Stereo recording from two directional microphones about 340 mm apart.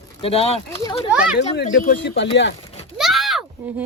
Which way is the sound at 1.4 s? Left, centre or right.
Left.